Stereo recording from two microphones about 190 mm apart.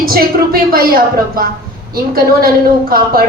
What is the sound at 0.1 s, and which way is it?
A woman's voice, 50° right (ahead or behind).